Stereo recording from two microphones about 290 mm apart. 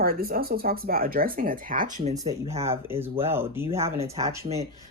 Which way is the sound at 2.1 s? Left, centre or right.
Centre.